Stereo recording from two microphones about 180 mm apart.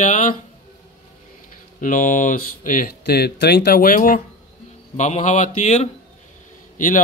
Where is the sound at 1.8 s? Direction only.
45° left (ahead or behind).